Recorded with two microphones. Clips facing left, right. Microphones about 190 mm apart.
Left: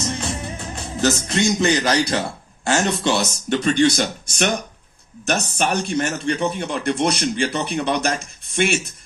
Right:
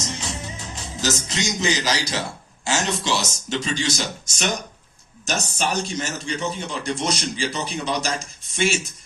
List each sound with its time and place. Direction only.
0.0 s music: 60° left (ahead or behind)
2.6 s speech: 60° left (ahead or behind)